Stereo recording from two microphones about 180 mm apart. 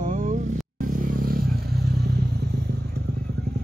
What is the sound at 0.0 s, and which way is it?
Vehicle, 45° right (ahead or behind).